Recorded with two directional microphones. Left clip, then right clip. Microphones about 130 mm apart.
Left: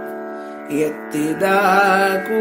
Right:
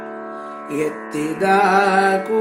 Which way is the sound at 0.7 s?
45° left (ahead or behind).